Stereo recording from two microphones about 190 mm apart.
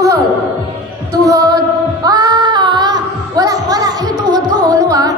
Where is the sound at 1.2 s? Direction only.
15° right (ahead or behind).